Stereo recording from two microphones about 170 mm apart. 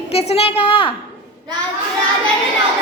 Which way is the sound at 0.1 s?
35° left (ahead or behind).